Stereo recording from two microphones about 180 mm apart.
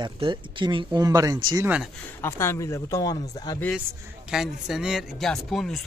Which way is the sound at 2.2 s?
15° left (ahead or behind).